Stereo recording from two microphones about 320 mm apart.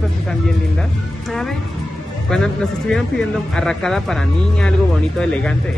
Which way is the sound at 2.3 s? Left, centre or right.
Centre.